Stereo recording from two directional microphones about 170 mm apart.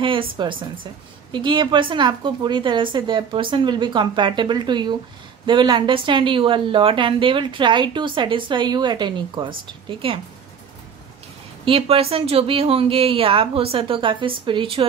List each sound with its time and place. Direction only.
0.0 s a woman's voice: 30° right (ahead or behind)
11.6 s a woman's voice: 35° right (ahead or behind)